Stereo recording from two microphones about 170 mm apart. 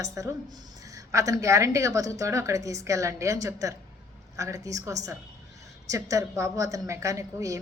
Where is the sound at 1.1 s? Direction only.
20° right (ahead or behind).